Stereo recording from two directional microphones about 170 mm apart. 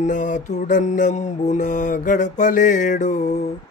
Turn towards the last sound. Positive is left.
turn(degrees=45)  # may be behind; listen again after turning